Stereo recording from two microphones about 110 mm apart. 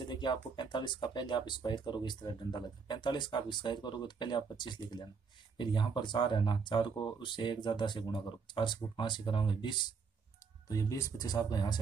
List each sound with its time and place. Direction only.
0.1 s speech: 45° left (ahead or behind)
10.7 s speech: 30° left (ahead or behind)